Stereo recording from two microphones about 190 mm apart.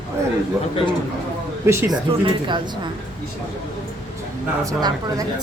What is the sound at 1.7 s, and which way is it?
Speech, 10° right (ahead or behind).